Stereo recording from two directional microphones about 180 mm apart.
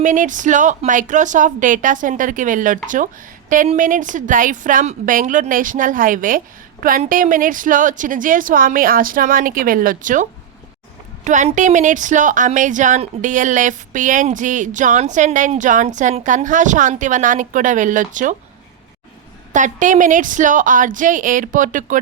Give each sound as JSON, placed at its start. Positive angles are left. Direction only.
{"t": 0.0, "sound": "a woman's voice", "side_deg": -45}
{"t": 19.5, "sound": "a woman's voice", "side_deg": -45}